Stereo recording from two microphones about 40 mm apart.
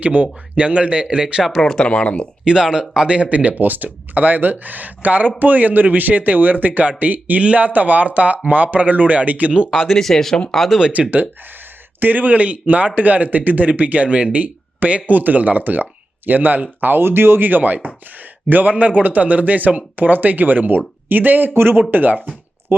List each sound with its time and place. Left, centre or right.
0.0 s speech: right
1.0 s speech: centre
1.5 s speech: centre
1.7 s speech: left
2.4 s speech: centre
3.2 s a man's voice: right
9.9 s speech: centre
11.0 s speech: centre
11.9 s speech: right
16.8 s a man's voice: right
21.5 s speech: right